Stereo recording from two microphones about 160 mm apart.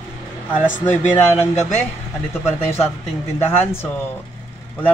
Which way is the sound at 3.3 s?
15° left (ahead or behind).